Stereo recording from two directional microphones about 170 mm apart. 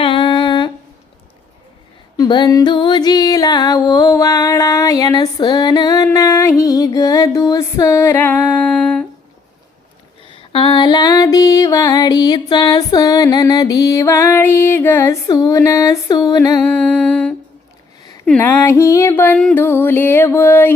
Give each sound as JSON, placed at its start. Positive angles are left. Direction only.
{"t": 0.0, "sound": "humming", "side_deg": 30}
{"t": 2.1, "sound": "music", "side_deg": 25}
{"t": 10.2, "sound": "music", "side_deg": 30}
{"t": 16.6, "sound": "music", "side_deg": 10}